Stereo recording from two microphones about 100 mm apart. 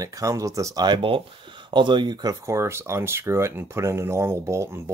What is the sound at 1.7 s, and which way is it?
Speech, 50° right (ahead or behind).